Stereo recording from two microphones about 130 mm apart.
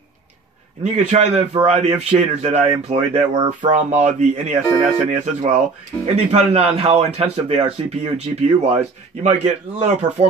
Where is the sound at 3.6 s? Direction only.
65° right (ahead or behind).